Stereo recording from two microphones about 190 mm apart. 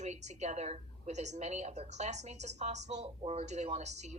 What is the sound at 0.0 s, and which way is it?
A woman's voice, 35° right (ahead or behind).